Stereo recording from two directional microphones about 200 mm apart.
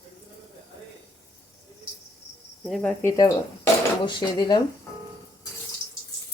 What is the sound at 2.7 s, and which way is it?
Speech, 5° left (ahead or behind).